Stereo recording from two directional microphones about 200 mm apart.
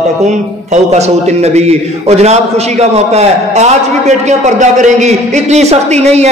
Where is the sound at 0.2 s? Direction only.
35° right (ahead or behind).